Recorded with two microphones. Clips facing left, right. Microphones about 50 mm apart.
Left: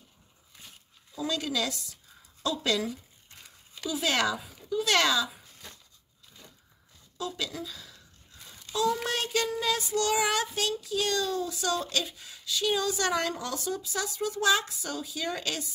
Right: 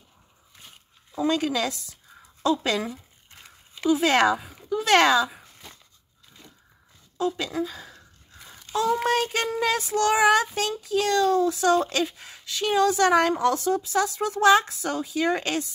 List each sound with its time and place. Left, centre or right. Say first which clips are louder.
1.1 s child singing: right 7 dB; right
3.4 s a sound: right 13 dB; right
7.2 s child singing: right 8 dB; right